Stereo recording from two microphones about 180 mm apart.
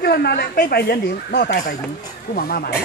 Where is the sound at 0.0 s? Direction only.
60° left (ahead or behind).